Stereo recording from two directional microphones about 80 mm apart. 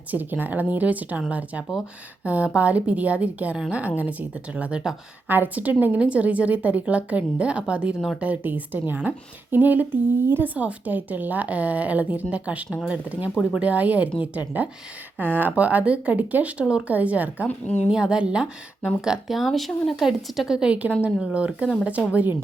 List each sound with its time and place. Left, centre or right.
0.1 s a woman's voice: right
5.3 s a woman's voice: right